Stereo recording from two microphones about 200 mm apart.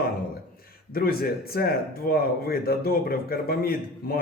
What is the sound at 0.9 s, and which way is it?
Speech, 50° left (ahead or behind).